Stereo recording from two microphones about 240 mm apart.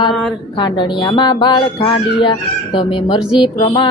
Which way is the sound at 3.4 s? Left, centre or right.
Centre.